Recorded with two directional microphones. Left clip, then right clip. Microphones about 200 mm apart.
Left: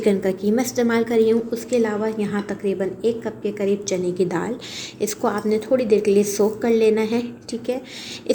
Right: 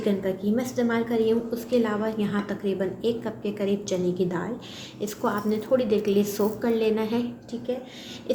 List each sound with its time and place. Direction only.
0.0 s a woman's voice: 35° left (ahead or behind); by 4.3 s 20° left (ahead or behind)
4.3 s a woman's voice: 30° left (ahead or behind)